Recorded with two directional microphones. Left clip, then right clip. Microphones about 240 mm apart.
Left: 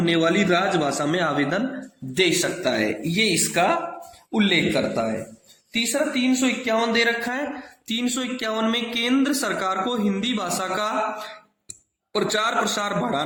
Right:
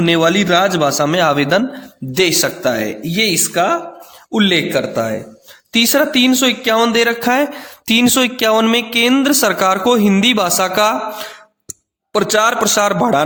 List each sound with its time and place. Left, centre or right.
0.0 s a man's voice: right
4.4 s a man's voice: right
12.1 s speech: right